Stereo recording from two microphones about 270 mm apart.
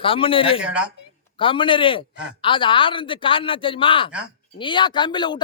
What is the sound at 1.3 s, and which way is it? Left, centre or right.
A woman's voice, centre.